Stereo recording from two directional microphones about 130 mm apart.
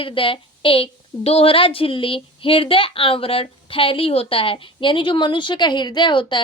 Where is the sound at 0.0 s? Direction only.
40° left (ahead or behind).